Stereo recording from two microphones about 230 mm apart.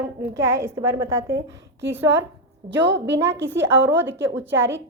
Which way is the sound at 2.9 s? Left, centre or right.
Right.